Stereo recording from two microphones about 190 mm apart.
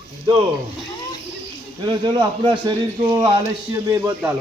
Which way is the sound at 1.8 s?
25° right (ahead or behind).